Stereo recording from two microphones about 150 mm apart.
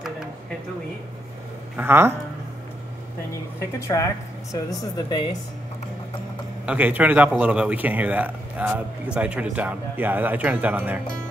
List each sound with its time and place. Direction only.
1.8 s a man's voice: 15° right (ahead or behind)
3.8 s a woman's voice: 20° left (ahead or behind)
6.6 s a man's voice: 10° right (ahead or behind)